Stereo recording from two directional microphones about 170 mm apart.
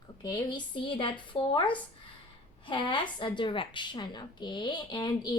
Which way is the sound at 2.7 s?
30° left (ahead or behind).